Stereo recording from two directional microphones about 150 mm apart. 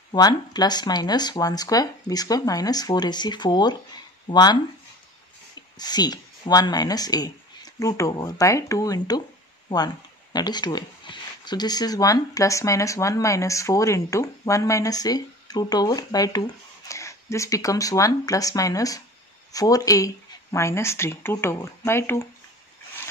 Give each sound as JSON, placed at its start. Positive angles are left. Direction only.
{"t": 0.1, "sound": "speech", "side_deg": 25}
{"t": 5.8, "sound": "speech", "side_deg": 25}
{"t": 10.3, "sound": "speech", "side_deg": 30}